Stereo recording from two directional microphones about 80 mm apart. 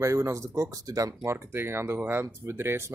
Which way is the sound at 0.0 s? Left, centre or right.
Right.